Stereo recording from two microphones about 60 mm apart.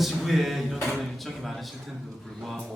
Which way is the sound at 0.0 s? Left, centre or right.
Centre.